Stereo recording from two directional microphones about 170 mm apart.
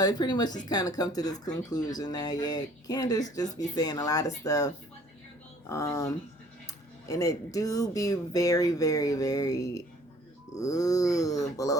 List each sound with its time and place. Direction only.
0.0 s speech: 25° left (ahead or behind)